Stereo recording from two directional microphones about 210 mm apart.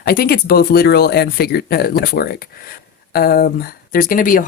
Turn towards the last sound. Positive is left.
turn(degrees=40)  # may be behind; listen again after turning